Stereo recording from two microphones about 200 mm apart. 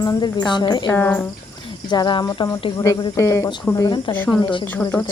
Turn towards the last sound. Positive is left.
turn(degrees=15)  # may be behind; listen again after turning